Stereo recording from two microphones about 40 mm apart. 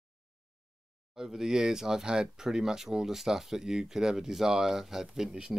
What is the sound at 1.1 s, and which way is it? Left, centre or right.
Speech, centre.